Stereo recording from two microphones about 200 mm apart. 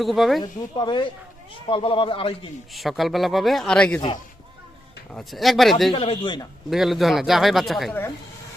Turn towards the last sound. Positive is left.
turn(degrees=0)  # may be behind; listen again after turning